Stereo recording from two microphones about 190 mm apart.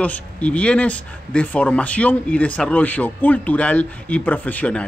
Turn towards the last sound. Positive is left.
turn(degrees=5)  # may be behind; listen again after turning